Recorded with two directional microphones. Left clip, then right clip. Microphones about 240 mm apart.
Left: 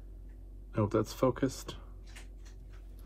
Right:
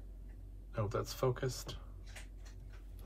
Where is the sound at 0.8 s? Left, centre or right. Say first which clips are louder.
Left 7 dB; left.